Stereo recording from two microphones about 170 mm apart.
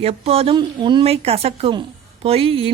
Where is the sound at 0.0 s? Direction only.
35° right (ahead or behind).